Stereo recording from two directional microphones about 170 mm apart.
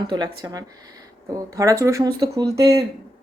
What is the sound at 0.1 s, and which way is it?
A woman's voice, 25° right (ahead or behind).